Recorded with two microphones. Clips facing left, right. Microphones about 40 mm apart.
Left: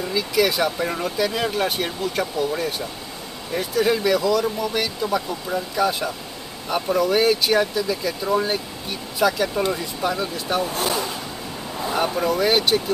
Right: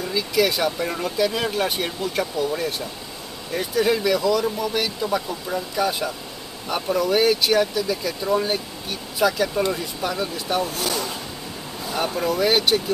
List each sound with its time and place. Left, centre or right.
0.0 s speech: centre
10.7 s speech: left
12.0 s speech: centre